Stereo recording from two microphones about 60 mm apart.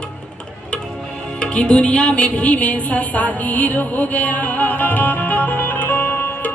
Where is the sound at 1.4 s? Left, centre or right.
Centre.